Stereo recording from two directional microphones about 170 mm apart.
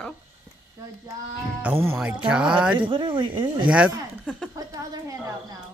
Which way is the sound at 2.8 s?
30° right (ahead or behind).